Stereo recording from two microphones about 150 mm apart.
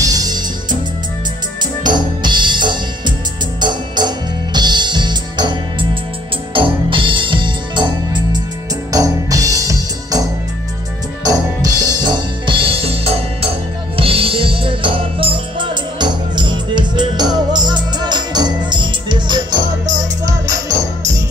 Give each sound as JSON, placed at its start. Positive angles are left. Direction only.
{"t": 0.0, "sound": "music", "side_deg": -25}
{"t": 1.8, "sound": "music", "side_deg": -30}
{"t": 11.2, "sound": "music", "side_deg": -25}